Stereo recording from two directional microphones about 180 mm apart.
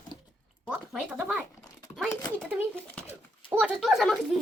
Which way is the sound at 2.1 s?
20° left (ahead or behind).